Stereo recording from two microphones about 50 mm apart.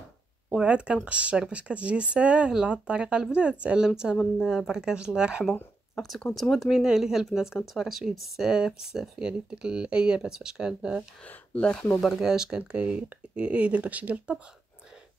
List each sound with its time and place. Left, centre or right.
0.6 s speech: right
4.4 s speech: centre
5.4 s speech: centre
11.2 s speech: left
12.0 s speech: centre; by 14.4 s right